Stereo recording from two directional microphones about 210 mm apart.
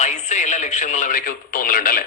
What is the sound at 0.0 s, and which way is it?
Speech, 35° left (ahead or behind).